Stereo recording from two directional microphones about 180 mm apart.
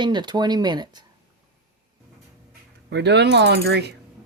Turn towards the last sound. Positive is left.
turn(degrees=-65)  # may be behind; listen again after turning